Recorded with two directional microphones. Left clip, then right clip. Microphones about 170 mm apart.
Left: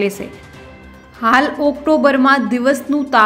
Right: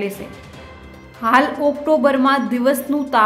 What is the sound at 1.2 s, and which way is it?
A woman's voice, 20° left (ahead or behind).